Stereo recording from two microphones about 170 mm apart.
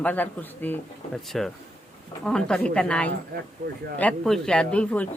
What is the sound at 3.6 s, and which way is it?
Speech, 50° right (ahead or behind).